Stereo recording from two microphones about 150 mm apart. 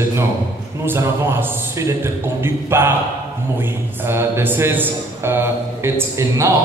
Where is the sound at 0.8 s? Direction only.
15° right (ahead or behind).